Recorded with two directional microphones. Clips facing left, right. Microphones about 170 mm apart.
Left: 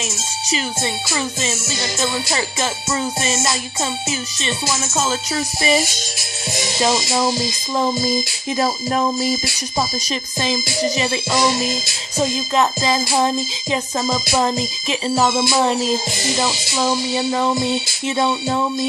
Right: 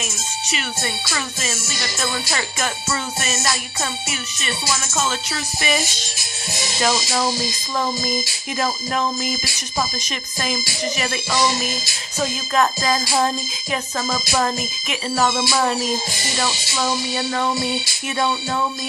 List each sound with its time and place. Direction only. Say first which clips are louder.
1.1 s music: left 4 dB; 25° left (ahead or behind)
6.8 s music: left 2 dB; 15° left (ahead or behind)
8.5 s music: left 3 dB; 30° left (ahead or behind)
10.4 s music: left 4 dB; 25° left (ahead or behind)
12.2 s music: left 2 dB; 20° left (ahead or behind)